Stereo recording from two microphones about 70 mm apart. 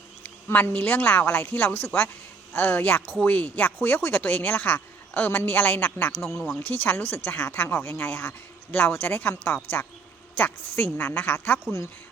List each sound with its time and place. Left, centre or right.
0.4 s speech: left
6.2 s speech: centre
6.6 s speech: left